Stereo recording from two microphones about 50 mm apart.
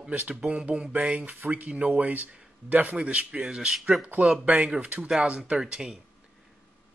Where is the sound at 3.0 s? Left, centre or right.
Right.